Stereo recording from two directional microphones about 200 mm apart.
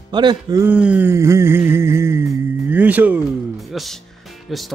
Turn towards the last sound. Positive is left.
turn(degrees=0)  # may be behind; listen again after turning